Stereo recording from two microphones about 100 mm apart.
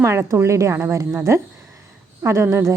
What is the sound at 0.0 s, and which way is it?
A woman's voice, 30° right (ahead or behind).